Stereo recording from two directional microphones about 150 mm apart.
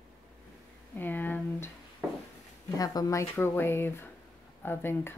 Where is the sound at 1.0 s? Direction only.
10° left (ahead or behind).